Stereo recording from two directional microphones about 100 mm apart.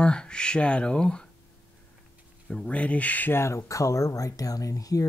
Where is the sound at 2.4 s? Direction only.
10° left (ahead or behind).